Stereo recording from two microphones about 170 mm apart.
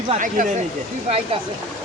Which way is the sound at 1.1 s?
35° right (ahead or behind).